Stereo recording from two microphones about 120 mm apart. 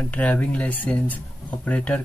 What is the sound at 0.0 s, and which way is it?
Speech, 10° left (ahead or behind).